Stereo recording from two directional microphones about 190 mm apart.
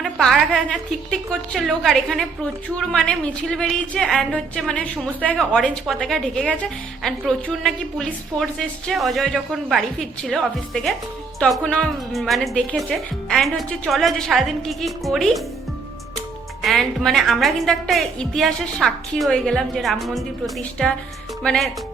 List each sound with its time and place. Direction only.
0.0 s a woman's voice: centre (ahead or behind)
16.6 s a woman's voice: centre (ahead or behind)